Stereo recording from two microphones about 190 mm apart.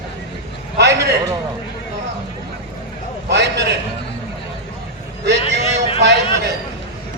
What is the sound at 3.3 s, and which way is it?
Speech, 65° right (ahead or behind).